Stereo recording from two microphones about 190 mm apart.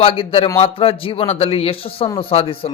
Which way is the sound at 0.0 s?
30° left (ahead or behind).